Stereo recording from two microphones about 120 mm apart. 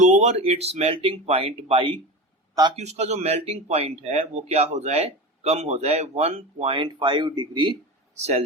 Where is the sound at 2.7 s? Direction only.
65° right (ahead or behind); by 7.7 s 40° right (ahead or behind).